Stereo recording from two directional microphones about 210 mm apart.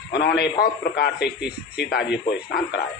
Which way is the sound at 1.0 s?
50° left (ahead or behind).